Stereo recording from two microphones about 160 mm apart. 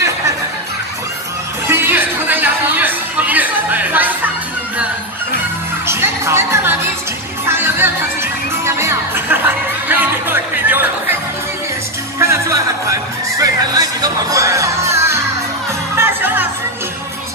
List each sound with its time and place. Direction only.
1.7 s a sound: 15° right (ahead or behind)
5.9 s music: 15° right (ahead or behind)
12.2 s music: 15° right (ahead or behind)